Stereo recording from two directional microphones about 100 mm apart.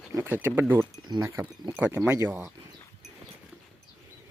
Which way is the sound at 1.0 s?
45° right (ahead or behind).